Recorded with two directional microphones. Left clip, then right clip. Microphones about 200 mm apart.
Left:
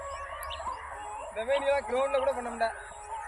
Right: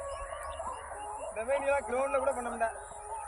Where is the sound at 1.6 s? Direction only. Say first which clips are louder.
Left 2 dB; 35° left (ahead or behind).